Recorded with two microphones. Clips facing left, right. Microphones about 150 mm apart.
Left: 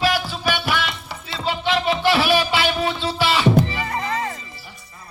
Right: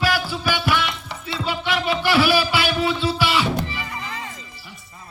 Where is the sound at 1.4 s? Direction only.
25° left (ahead or behind).